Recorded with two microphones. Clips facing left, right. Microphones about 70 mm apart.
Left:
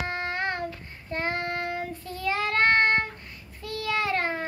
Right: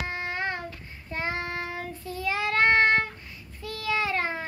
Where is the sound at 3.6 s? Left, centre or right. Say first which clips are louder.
Left 2 dB; left.